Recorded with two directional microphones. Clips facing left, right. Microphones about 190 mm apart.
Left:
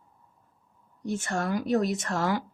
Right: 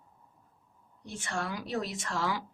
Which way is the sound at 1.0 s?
45° left (ahead or behind).